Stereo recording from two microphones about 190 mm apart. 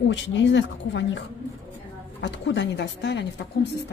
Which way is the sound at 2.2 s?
65° left (ahead or behind).